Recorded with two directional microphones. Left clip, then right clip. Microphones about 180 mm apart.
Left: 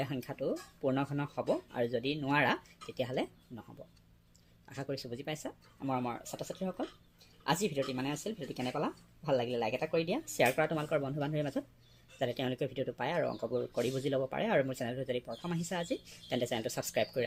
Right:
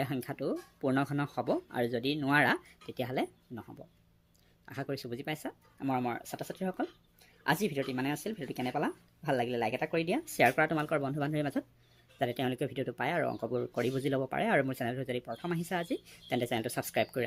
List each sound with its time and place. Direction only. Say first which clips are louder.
0.0 s speech: right 1 dB; 45° right (ahead or behind)
4.7 s speech: right 2 dB; 45° right (ahead or behind)